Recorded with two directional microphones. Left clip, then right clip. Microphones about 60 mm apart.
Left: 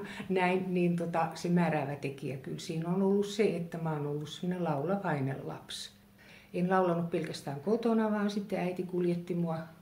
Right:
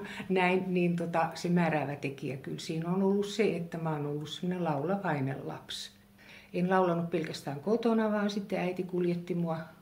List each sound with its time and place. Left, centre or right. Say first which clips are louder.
0.3 s speech: right 2 dB; centre
6.5 s speech: right 1 dB; right